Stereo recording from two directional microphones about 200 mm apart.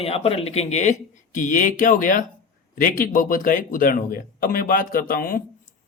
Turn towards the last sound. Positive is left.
turn(degrees=45)  # may be behind; listen again after turning